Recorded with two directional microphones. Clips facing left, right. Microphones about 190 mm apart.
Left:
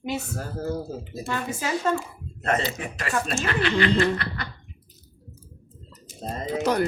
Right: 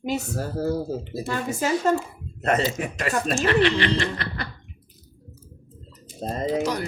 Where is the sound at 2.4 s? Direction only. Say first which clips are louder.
Right 3 dB; 40° right (ahead or behind).